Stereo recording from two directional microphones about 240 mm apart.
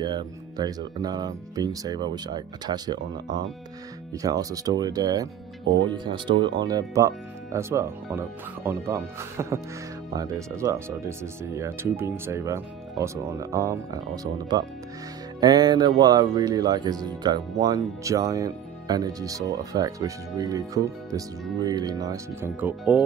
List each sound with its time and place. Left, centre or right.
0.0 s speech: centre
4.1 s speech: centre